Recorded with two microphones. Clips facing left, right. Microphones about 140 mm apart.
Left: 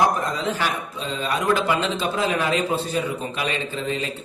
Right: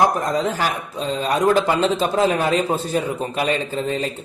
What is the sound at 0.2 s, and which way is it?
Speech, 40° right (ahead or behind).